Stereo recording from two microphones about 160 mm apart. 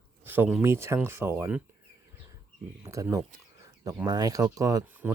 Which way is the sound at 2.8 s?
20° right (ahead or behind).